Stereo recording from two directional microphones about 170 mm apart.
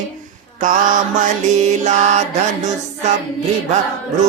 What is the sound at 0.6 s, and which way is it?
Mantra, 50° right (ahead or behind).